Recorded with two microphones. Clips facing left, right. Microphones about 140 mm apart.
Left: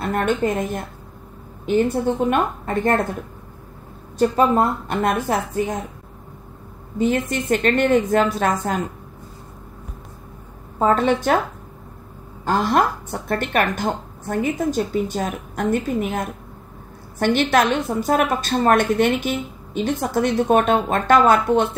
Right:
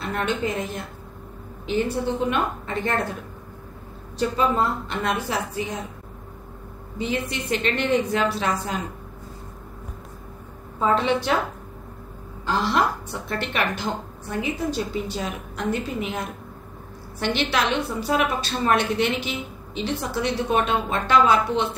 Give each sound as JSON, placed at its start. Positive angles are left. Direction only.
{"t": 0.0, "sound": "a woman's voice", "side_deg": 50}
{"t": 4.2, "sound": "a woman's voice", "side_deg": 50}
{"t": 7.0, "sound": "a woman's voice", "side_deg": 45}
{"t": 10.8, "sound": "a woman's voice", "side_deg": 45}
{"t": 12.4, "sound": "a woman's voice", "side_deg": 50}